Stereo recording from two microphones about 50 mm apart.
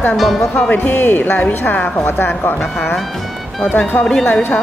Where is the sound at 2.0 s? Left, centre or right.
Left.